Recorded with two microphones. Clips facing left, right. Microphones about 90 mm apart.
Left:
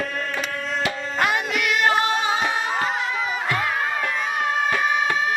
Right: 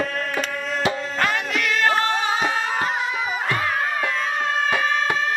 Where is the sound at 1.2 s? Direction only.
15° left (ahead or behind).